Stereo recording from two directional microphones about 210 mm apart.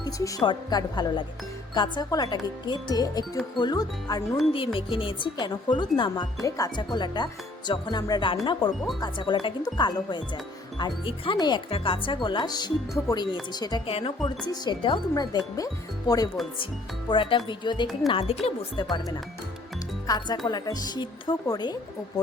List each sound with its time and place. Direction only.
0.0 s speech: 15° left (ahead or behind)